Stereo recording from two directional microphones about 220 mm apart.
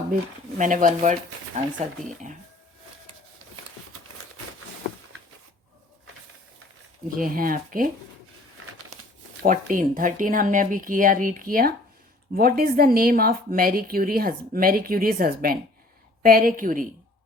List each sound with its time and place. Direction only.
0.6 s speech: 35° right (ahead or behind)
7.2 s speech: 40° right (ahead or behind)
9.4 s speech: 40° right (ahead or behind)